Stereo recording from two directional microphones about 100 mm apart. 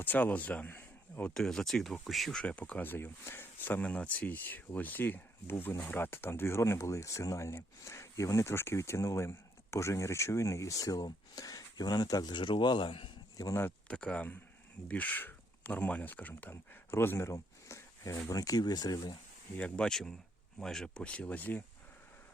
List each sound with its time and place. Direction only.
0.0 s speech: 15° left (ahead or behind)
1.3 s speech: 5° left (ahead or behind); by 13.1 s 60° left (ahead or behind)
13.3 s speech: 35° left (ahead or behind)
13.6 s a sound: 20° left (ahead or behind)
13.9 s speech: 10° left (ahead or behind); by 19.1 s 45° left (ahead or behind)
19.5 s speech: 10° left (ahead or behind)